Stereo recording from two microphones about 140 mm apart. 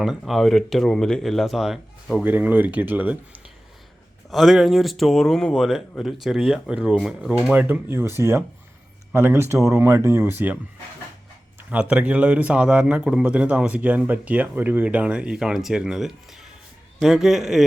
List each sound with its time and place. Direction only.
0.0 s speech: centre (ahead or behind)
2.2 s a man's voice: 10° right (ahead or behind)
4.3 s a man's voice: centre (ahead or behind)
11.7 s a man's voice: 10° right (ahead or behind)